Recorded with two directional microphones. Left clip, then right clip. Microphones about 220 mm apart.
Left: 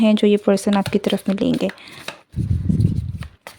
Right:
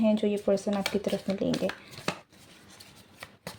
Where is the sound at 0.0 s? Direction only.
40° left (ahead or behind).